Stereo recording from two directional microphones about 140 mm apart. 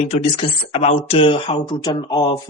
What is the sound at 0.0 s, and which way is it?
Speech, 50° left (ahead or behind).